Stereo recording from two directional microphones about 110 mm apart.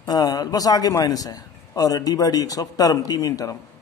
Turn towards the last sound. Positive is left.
turn(degrees=30)  # may be behind; listen again after turning